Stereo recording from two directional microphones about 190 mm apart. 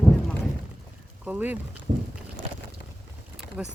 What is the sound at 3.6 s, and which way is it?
Speech, 5° right (ahead or behind).